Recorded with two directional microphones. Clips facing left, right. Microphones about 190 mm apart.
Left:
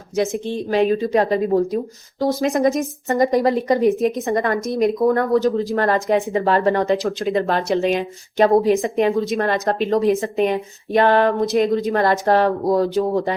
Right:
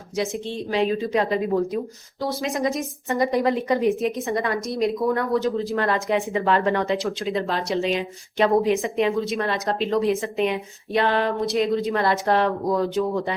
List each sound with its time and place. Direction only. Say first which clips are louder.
0.2 s speech: left 5 dB; 50° left (ahead or behind)
2.2 s speech: left 7 dB; 50° left (ahead or behind)
8.4 s speech: left 4 dB; 35° left (ahead or behind)